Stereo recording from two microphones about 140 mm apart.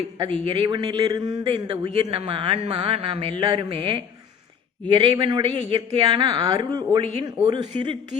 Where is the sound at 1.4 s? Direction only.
40° right (ahead or behind).